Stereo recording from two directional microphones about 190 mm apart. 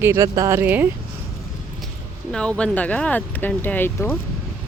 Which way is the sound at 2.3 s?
5° left (ahead or behind).